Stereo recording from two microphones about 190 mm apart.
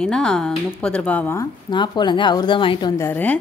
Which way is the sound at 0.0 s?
5° left (ahead or behind).